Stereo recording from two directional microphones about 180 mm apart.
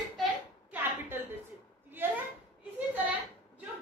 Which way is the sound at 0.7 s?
10° right (ahead or behind).